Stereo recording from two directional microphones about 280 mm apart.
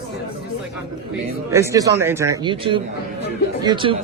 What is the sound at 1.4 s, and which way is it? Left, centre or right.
Speech, centre.